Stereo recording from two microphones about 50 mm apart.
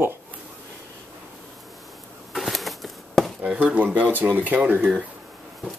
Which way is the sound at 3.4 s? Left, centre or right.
Right.